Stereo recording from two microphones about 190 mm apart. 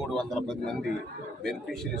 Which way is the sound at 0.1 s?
Centre (ahead or behind).